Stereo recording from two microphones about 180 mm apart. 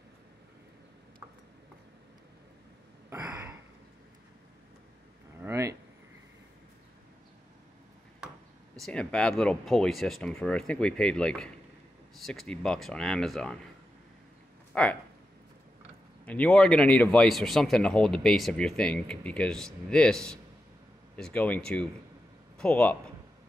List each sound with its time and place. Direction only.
5.4 s a sound: 15° right (ahead or behind)
8.7 s speech: 5° left (ahead or behind)
14.7 s speech: 5° left (ahead or behind)
16.3 s speech: 5° left (ahead or behind)